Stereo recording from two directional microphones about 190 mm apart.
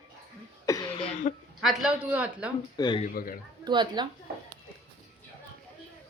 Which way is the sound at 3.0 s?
50° left (ahead or behind).